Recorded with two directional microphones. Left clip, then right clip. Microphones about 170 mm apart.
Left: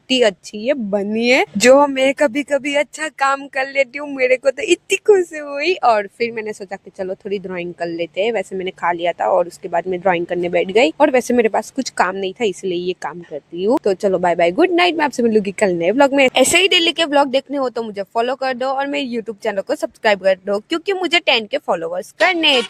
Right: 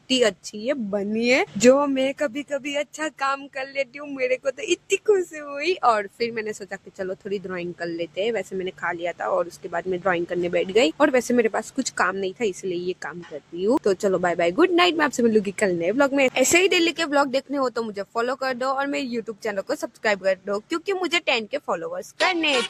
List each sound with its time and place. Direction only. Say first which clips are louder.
0.1 s speech: left 6 dB; 25° left (ahead or behind)
1.5 s speech: left 7 dB; 45° left (ahead or behind); by 13.1 s 25° left (ahead or behind)
13.8 s speech: left 5 dB; 15° left (ahead or behind); by 22.0 s 30° left (ahead or behind)